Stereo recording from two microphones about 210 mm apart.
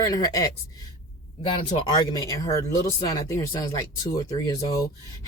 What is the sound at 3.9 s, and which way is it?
Speech, 15° left (ahead or behind).